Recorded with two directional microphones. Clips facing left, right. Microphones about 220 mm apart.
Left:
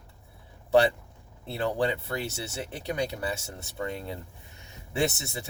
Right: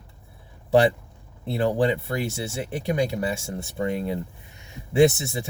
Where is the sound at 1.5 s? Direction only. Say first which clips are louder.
Right 6 dB; 15° right (ahead or behind).